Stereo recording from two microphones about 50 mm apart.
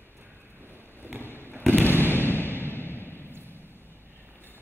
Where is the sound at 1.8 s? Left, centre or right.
Left.